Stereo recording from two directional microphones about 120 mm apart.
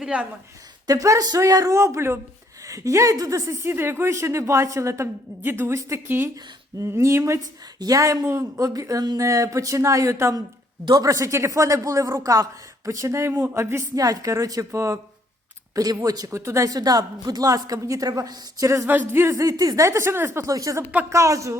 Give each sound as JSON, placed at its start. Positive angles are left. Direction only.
{"t": 0.0, "sound": "a woman's voice", "side_deg": -10}
{"t": 0.9, "sound": "speech", "side_deg": -30}